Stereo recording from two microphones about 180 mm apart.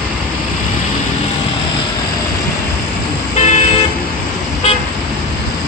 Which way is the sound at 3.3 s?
40° left (ahead or behind).